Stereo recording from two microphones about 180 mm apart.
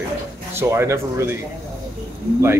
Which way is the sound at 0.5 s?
15° right (ahead or behind).